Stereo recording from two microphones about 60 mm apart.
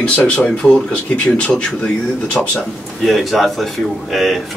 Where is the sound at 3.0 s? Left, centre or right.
Centre.